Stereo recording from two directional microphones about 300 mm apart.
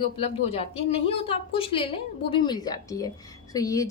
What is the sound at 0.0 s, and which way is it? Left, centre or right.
A woman's voice, centre.